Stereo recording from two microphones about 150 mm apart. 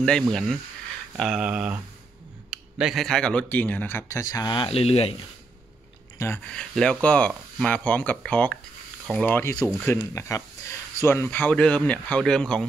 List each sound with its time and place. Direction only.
0.3 s speech: 5° left (ahead or behind); by 5.1 s 40° left (ahead or behind)
6.1 s speech: 15° left (ahead or behind)
6.5 s speech: 5° left (ahead or behind)